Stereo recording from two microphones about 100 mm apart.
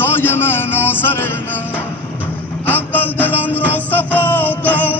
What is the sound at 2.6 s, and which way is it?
Music, 20° left (ahead or behind).